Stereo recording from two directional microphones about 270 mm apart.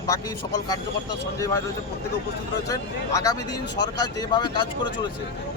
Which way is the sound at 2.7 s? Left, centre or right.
Centre.